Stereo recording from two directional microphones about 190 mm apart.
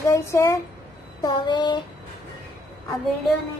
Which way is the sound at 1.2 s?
20° left (ahead or behind).